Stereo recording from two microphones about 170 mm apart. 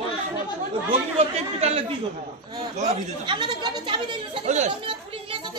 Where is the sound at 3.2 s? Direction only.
30° right (ahead or behind).